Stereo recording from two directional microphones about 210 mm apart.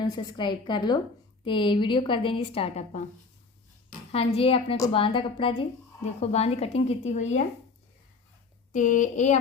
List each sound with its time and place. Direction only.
0.0 s a woman's voice: 20° left (ahead or behind)
4.1 s a woman's voice: 25° left (ahead or behind)
8.7 s speech: 35° left (ahead or behind)